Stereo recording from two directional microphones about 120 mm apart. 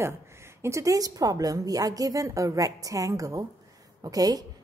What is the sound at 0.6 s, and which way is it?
A woman's voice, 25° right (ahead or behind).